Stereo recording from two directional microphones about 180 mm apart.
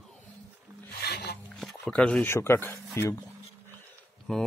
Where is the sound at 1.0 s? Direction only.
60° left (ahead or behind).